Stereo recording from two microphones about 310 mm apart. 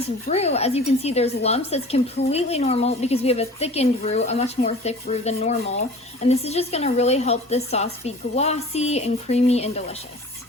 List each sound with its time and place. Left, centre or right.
0.3 s speech: centre